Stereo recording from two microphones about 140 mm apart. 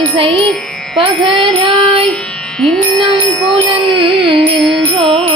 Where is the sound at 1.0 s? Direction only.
40° right (ahead or behind).